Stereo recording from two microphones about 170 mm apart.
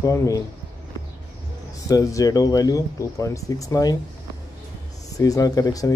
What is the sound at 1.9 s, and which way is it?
Speech, 20° left (ahead or behind).